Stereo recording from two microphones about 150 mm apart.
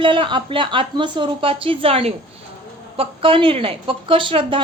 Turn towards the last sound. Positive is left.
turn(degrees=-35)  # may be behind; listen again after turning